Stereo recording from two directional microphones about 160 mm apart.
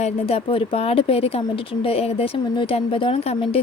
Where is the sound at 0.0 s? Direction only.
35° left (ahead or behind).